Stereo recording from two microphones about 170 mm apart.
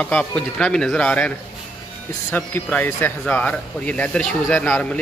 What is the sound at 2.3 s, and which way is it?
Speech, 10° left (ahead or behind).